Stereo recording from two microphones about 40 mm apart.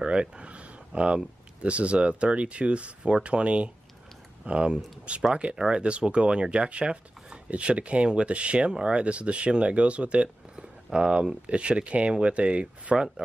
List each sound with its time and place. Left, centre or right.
0.0 s speech: right
10.5 s speech: centre